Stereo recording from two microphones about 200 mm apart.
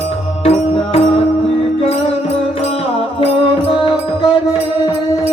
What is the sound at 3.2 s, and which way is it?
Music, 25° left (ahead or behind).